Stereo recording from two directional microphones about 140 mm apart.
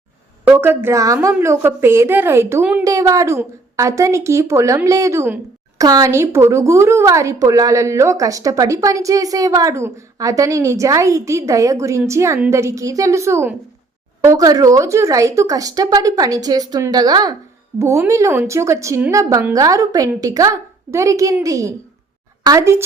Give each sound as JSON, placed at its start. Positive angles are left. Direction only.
{"t": 0.4, "sound": "a woman's voice", "side_deg": -15}